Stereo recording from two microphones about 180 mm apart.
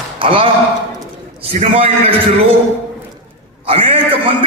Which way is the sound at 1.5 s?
30° right (ahead or behind).